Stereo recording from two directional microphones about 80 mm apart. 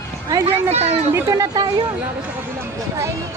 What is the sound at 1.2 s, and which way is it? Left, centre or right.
Speech, right.